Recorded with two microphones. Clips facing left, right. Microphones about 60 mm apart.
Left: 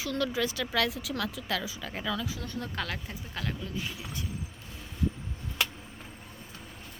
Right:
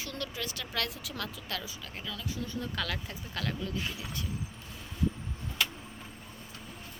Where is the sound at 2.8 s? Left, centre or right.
Left.